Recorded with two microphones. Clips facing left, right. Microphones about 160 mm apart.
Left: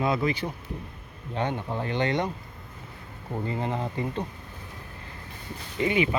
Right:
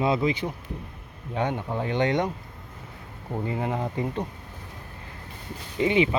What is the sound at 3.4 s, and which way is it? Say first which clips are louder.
Speech: right 2 dB; 10° right (ahead or behind).